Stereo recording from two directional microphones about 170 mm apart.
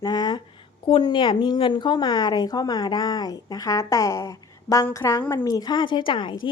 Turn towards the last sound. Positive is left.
turn(degrees=30)  # may be behind; listen again after turning